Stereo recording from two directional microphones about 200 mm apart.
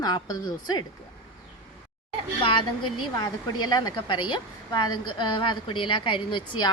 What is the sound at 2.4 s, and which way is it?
A woman's voice, 25° left (ahead or behind).